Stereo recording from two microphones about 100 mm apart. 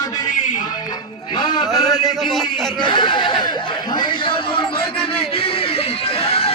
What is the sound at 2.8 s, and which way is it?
Speech, 50° left (ahead or behind).